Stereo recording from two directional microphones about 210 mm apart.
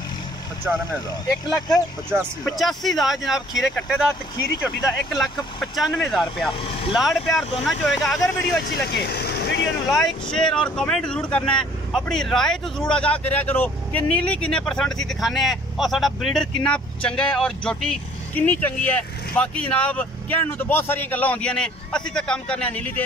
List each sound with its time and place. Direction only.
0.7 s speech: 5° right (ahead or behind)
6.6 s speech: 25° left (ahead or behind)
7.0 s speech: centre (ahead or behind)
8.9 s vehicle: 50° left (ahead or behind)
9.9 s speech: centre (ahead or behind)